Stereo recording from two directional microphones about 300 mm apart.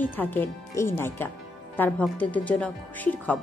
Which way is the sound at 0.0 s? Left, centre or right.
Centre.